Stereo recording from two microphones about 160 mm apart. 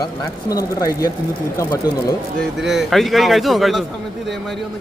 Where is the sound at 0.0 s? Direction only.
20° left (ahead or behind).